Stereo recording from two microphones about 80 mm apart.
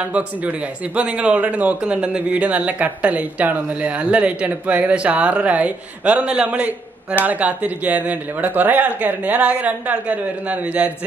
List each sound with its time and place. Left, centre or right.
0.0 s a man's voice: centre